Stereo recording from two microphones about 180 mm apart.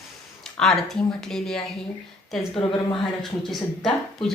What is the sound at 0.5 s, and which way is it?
Speech, centre (ahead or behind).